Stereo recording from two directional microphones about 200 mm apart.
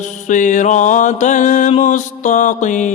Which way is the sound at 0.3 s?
40° left (ahead or behind).